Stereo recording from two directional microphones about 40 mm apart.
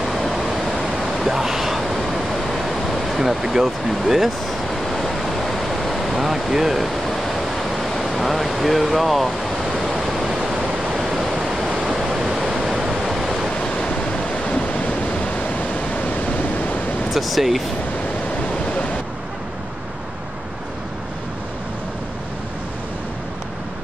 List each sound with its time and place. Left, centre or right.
0.0 s a sound: centre
11.0 s pink noise: centre
12.2 s waves: centre
13.8 s waves: left
17.1 s speech: centre